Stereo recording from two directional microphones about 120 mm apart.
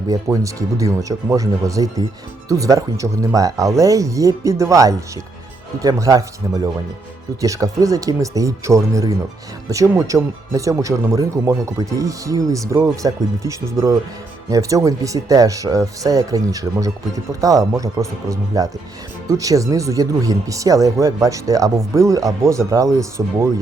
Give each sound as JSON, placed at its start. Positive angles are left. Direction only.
{"t": 0.1, "sound": "speech", "side_deg": -25}